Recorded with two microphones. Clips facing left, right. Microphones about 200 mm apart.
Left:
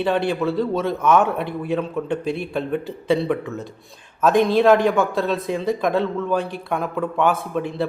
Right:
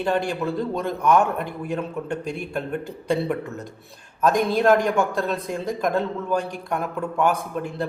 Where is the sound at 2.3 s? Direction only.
45° right (ahead or behind).